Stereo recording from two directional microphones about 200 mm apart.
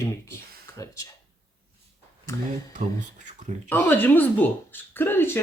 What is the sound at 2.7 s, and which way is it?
Speech, 40° right (ahead or behind).